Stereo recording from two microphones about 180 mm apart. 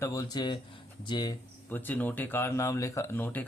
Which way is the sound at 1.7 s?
10° left (ahead or behind).